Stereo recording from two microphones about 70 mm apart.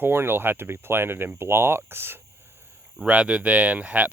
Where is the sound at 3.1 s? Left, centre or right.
Centre.